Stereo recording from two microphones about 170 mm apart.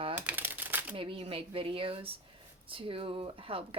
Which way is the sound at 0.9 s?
30° right (ahead or behind).